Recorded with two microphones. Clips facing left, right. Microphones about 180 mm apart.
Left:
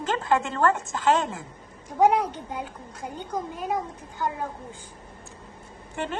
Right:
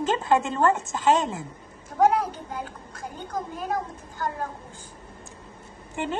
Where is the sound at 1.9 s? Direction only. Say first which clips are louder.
Left 1 dB; 15° left (ahead or behind).